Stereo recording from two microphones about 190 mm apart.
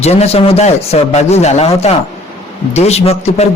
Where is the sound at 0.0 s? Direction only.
35° left (ahead or behind).